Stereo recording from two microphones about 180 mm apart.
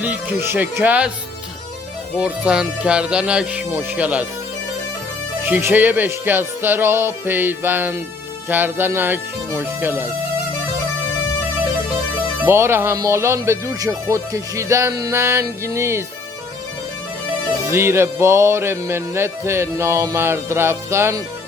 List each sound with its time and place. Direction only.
0.0 s speech: 10° right (ahead or behind)
2.1 s speech: 5° right (ahead or behind)
5.5 s speech: 10° right (ahead or behind)
12.5 s speech: 15° right (ahead or behind)
17.7 s speech: 15° right (ahead or behind)